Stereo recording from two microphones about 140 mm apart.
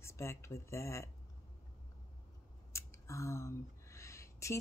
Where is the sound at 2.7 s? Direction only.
20° left (ahead or behind).